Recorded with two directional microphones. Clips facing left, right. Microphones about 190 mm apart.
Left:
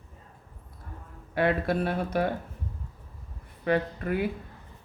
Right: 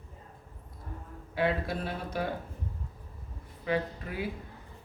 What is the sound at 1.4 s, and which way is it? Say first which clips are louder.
Speech: left 5 dB; 60° left (ahead or behind).